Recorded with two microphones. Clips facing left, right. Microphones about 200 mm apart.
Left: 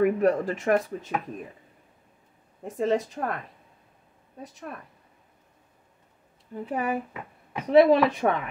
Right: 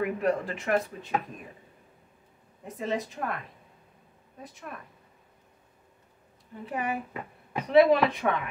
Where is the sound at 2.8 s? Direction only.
40° left (ahead or behind).